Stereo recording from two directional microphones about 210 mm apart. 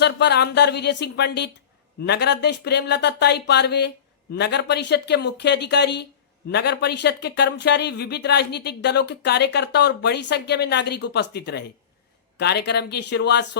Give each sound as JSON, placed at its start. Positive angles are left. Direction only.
{"t": 0.0, "sound": "speech", "side_deg": 55}